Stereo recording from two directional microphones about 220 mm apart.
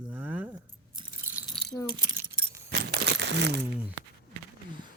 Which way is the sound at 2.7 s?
45° right (ahead or behind).